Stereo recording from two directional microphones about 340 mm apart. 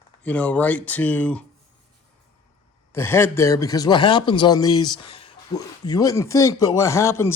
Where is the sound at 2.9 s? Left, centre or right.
Centre.